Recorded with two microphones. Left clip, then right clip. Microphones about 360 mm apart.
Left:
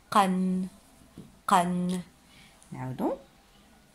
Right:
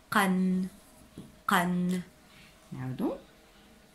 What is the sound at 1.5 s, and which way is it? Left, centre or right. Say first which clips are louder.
Speech: left 3 dB; centre.